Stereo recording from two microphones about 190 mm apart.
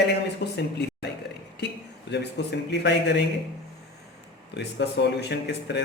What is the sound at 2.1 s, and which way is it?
Speech, 65° left (ahead or behind).